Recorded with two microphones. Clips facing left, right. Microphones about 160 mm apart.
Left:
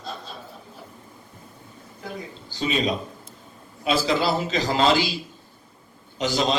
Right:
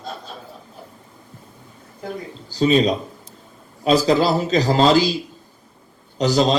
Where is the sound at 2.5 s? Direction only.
35° right (ahead or behind).